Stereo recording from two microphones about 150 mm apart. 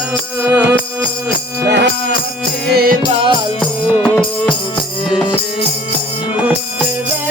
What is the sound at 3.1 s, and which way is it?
Music, 35° right (ahead or behind).